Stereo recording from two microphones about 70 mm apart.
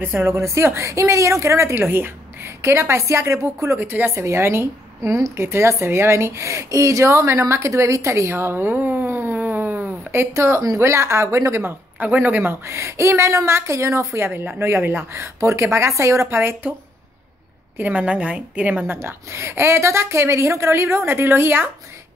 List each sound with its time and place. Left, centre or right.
0.0 s a woman's voice: right
10.1 s a woman's voice: right
12.0 s a woman's voice: right
12.7 s a woman's voice: right
17.7 s a woman's voice: right
18.9 s a woman's voice: right